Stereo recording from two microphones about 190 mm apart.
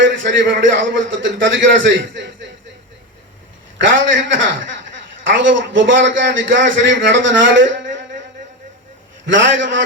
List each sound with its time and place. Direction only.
0.0 s a man's voice: 75° right (ahead or behind)
3.8 s a man's voice: 75° right (ahead or behind)
9.2 s a man's voice: 75° right (ahead or behind)